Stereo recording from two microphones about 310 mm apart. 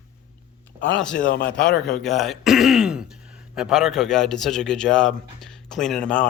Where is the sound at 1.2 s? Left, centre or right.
Left.